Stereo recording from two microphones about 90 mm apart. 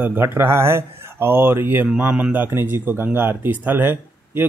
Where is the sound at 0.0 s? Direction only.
25° right (ahead or behind).